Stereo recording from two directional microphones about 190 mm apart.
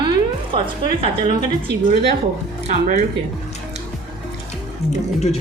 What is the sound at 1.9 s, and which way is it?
Speech, 60° right (ahead or behind).